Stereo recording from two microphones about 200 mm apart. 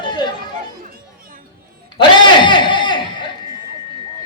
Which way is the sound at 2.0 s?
25° left (ahead or behind).